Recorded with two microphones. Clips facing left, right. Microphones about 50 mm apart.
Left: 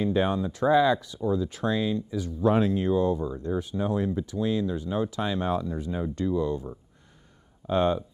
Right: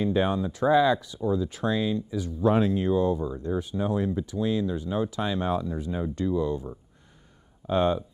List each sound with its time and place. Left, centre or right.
0.0 s speech: centre